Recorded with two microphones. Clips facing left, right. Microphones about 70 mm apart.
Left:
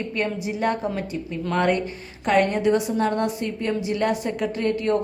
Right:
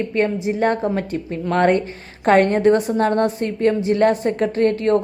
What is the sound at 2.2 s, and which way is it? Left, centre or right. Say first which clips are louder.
A woman's voice: right 6 dB; right.